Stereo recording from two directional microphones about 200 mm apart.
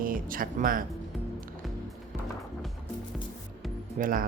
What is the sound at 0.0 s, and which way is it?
Speech, 45° right (ahead or behind).